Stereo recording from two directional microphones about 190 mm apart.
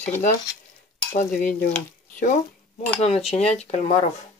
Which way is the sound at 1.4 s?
10° left (ahead or behind).